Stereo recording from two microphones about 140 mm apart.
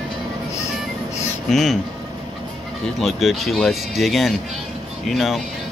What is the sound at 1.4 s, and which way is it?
Speech, centre (ahead or behind).